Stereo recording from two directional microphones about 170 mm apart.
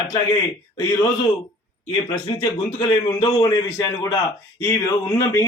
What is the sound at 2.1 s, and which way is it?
A man's voice, 25° left (ahead or behind).